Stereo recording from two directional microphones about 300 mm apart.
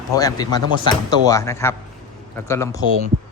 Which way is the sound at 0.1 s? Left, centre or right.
Centre.